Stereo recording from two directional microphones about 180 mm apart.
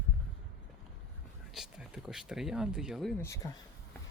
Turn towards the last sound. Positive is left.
turn(degrees=20)  # may be behind; listen again after turning